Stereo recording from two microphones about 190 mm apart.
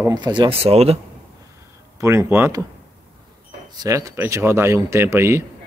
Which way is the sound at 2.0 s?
15° right (ahead or behind).